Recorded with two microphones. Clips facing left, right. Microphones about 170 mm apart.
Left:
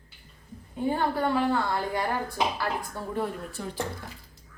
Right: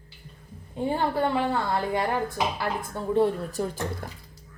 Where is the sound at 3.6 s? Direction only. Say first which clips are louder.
Right 4 dB; 45° right (ahead or behind).